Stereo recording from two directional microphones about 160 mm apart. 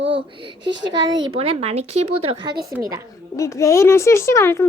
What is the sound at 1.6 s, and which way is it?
Speech, 40° right (ahead or behind).